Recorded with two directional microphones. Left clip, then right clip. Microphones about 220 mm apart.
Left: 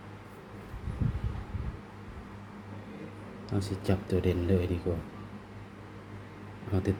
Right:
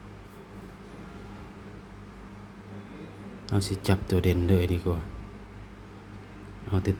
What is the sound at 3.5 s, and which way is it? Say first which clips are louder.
Speech: right 4 dB; 25° right (ahead or behind).